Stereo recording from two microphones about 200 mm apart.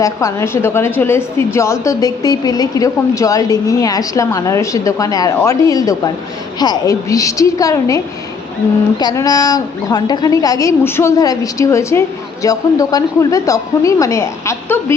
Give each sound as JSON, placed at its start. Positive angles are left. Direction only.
{"t": 0.0, "sound": "a woman's voice", "side_deg": 15}